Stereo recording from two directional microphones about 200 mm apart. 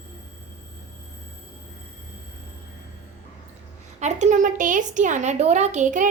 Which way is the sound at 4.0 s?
35° right (ahead or behind).